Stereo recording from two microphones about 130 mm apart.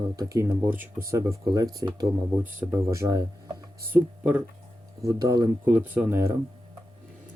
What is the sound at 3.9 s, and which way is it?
Speech, 10° right (ahead or behind).